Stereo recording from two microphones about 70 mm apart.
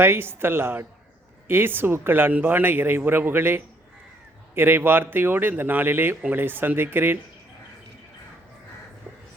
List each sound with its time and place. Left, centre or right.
0.0 s speech: right